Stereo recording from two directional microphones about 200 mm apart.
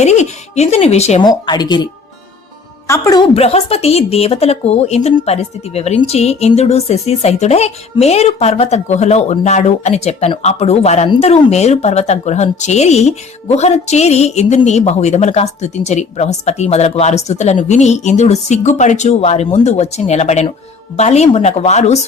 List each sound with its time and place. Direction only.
0.0 s a sound: 35° left (ahead or behind)
1.2 s a woman's voice: 20° left (ahead or behind)
3.3 s a woman's voice: 30° left (ahead or behind)